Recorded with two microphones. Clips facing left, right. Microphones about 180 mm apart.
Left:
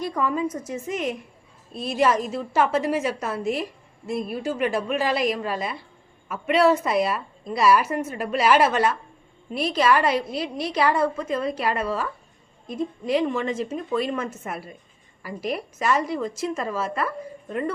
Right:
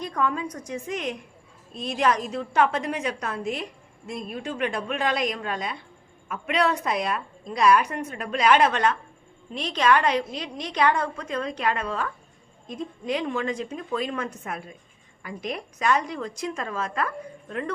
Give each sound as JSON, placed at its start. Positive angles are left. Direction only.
{"t": 0.0, "sound": "a woman's voice", "side_deg": 5}